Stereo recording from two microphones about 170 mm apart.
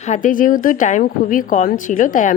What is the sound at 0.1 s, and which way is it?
A woman's voice, 50° left (ahead or behind).